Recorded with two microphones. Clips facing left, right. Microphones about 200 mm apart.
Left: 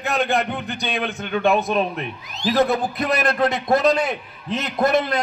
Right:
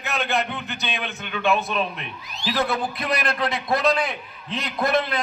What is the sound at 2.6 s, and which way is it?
A man's voice, 45° left (ahead or behind).